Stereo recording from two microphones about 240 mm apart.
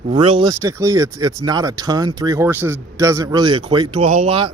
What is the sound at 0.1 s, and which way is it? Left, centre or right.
Speech, right.